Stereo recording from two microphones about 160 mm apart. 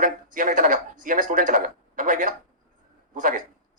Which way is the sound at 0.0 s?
55° right (ahead or behind).